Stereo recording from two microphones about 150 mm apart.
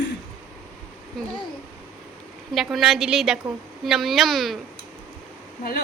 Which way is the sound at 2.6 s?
Centre (ahead or behind).